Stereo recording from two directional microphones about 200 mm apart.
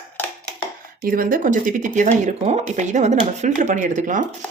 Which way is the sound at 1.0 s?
45° right (ahead or behind).